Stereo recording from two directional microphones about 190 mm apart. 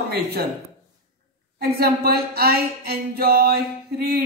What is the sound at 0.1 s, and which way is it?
Speech, 55° right (ahead or behind).